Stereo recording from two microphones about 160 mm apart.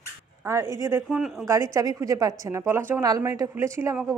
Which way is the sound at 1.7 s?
20° right (ahead or behind).